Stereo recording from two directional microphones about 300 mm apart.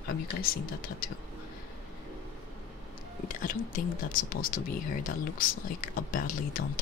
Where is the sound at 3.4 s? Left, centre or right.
Left.